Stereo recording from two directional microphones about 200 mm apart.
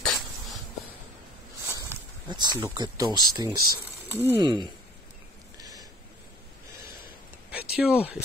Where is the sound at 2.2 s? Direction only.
20° right (ahead or behind).